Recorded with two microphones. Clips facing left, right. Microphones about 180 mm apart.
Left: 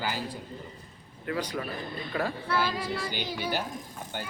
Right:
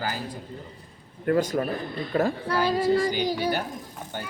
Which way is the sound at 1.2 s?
45° right (ahead or behind).